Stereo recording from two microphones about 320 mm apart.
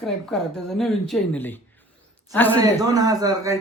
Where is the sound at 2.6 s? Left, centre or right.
Centre.